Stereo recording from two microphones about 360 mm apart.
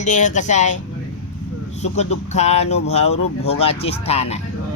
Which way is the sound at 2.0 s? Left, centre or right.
Centre.